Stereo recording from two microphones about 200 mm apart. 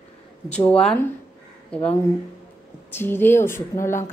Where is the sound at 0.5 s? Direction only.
5° left (ahead or behind).